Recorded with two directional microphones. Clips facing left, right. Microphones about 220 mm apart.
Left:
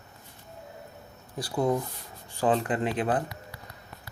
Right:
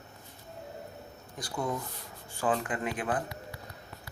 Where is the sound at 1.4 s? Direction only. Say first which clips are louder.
Left 7 dB; 35° left (ahead or behind).